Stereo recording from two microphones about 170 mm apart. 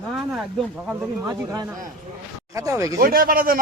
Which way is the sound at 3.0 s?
60° right (ahead or behind).